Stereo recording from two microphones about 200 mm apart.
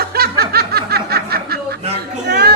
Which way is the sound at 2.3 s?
50° right (ahead or behind).